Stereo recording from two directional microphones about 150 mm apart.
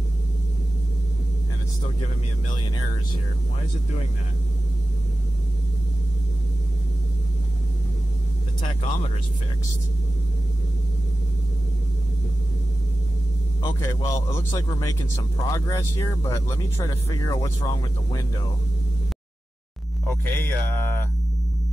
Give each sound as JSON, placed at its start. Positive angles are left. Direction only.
{"t": 2.5, "sound": "speech", "side_deg": 30}
{"t": 8.5, "sound": "speech", "side_deg": 40}
{"t": 13.6, "sound": "speech", "side_deg": 25}
{"t": 20.1, "sound": "speech", "side_deg": 15}